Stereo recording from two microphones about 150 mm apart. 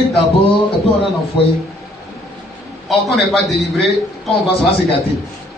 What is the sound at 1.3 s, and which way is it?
Speech, 30° left (ahead or behind).